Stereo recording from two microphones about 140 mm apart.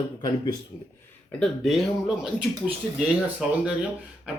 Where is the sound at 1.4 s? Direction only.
Centre (ahead or behind).